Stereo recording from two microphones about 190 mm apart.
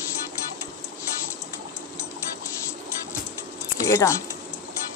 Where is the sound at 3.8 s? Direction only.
15° left (ahead or behind).